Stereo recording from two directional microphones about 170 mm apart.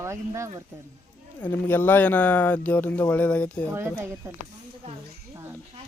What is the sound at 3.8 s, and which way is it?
Speech, 15° right (ahead or behind).